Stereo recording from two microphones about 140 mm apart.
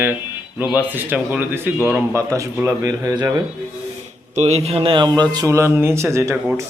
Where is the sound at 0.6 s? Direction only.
10° right (ahead or behind).